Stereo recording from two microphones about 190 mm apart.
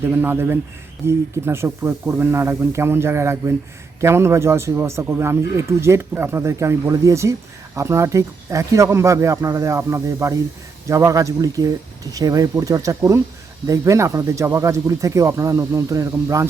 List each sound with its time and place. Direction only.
0.1 s a man's voice: 10° right (ahead or behind)